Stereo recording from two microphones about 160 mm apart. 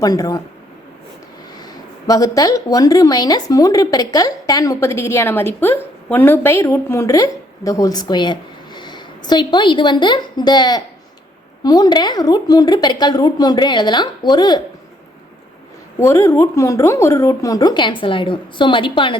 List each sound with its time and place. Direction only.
0.0 s speech: 25° left (ahead or behind)
1.5 s speech: 25° left (ahead or behind)
16.0 s speech: 15° left (ahead or behind)